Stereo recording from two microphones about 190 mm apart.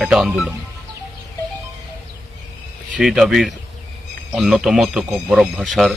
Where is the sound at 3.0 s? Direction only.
Centre (ahead or behind).